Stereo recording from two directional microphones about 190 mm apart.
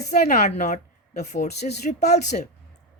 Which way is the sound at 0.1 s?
45° left (ahead or behind).